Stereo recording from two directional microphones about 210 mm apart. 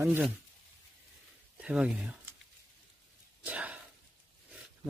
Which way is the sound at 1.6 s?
5° right (ahead or behind).